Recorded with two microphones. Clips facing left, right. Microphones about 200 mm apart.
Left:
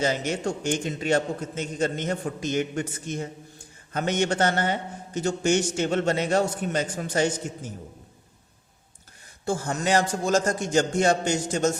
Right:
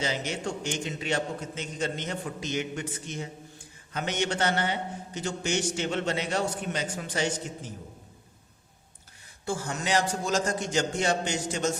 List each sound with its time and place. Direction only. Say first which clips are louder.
0.0 s a man's voice: left 5 dB; 45° left (ahead or behind)
9.5 s a man's voice: left 5 dB; 45° left (ahead or behind)